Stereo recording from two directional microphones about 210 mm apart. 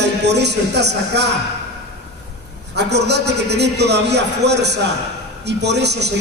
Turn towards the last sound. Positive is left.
turn(degrees=-55)  # may be behind; listen again after turning